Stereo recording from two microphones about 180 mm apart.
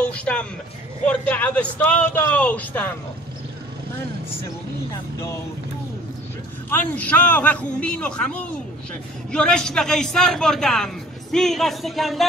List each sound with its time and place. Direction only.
0.2 s a sound: 5° left (ahead or behind)
1.0 s speech: 10° left (ahead or behind)
6.7 s a man's voice: 10° left (ahead or behind)